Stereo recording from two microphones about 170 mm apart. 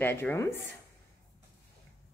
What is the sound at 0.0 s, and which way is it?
Speech, 15° left (ahead or behind).